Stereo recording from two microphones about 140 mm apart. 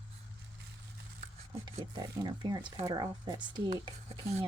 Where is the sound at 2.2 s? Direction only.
30° right (ahead or behind).